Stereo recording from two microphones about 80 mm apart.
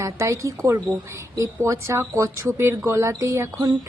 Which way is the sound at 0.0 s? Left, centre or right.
Right.